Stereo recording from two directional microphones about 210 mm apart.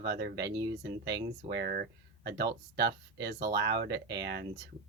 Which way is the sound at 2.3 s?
50° right (ahead or behind).